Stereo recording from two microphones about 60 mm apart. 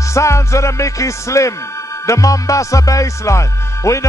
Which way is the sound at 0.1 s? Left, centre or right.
Left.